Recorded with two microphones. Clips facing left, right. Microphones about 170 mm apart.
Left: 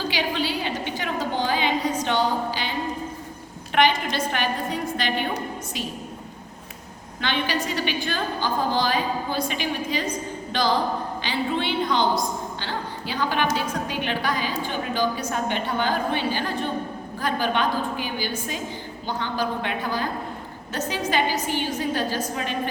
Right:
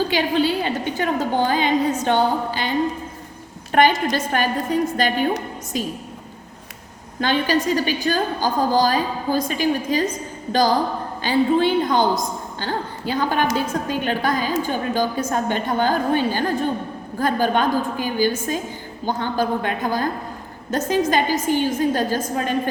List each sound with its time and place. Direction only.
0.1 s a woman's voice: 50° right (ahead or behind)
3.7 s a woman's voice: 45° right (ahead or behind)
7.2 s a woman's voice: 45° right (ahead or behind)